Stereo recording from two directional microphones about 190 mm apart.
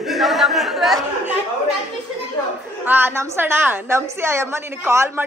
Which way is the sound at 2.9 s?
10° right (ahead or behind).